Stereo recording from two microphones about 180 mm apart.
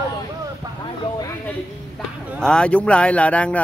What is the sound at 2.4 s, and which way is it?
Speech, 5° left (ahead or behind).